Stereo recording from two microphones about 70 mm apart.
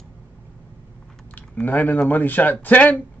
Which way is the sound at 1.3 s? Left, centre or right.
Left.